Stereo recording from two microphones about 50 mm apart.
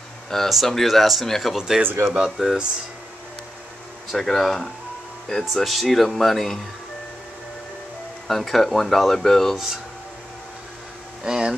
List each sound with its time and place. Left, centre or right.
0.3 s speech: centre
1.8 s speech: right
2.0 s speech: centre
4.1 s speech: centre
8.3 s speech: centre
11.2 s speech: centre